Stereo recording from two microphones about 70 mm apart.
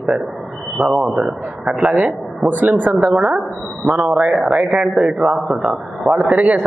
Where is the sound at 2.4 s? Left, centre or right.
Right.